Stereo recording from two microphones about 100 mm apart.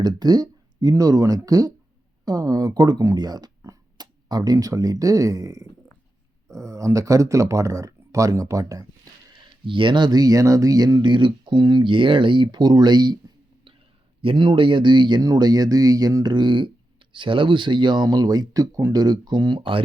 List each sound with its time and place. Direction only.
0.0 s speech: 40° right (ahead or behind)
9.3 s speech: 55° right (ahead or behind)
14.2 s speech: 60° right (ahead or behind)